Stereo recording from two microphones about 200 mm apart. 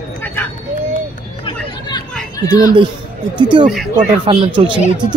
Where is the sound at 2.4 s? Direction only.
20° left (ahead or behind).